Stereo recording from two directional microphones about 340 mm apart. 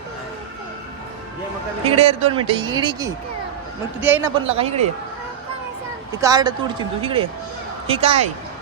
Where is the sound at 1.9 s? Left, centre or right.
Centre.